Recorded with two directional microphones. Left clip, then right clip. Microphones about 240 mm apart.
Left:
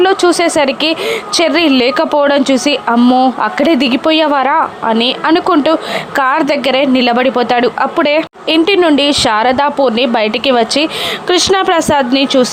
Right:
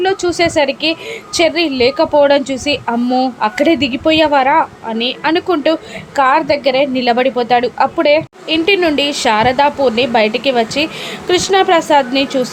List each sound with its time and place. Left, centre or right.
0.0 s a woman's voice: centre